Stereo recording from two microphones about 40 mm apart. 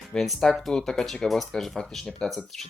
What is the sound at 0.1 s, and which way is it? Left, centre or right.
Speech, centre.